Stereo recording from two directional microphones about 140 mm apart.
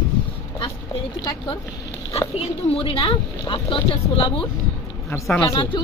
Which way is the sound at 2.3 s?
40° left (ahead or behind).